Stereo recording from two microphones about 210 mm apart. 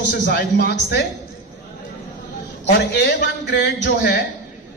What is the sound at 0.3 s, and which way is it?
Speech, 50° left (ahead or behind).